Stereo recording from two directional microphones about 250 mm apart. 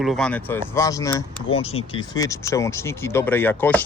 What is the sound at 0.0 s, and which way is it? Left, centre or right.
Speech, centre.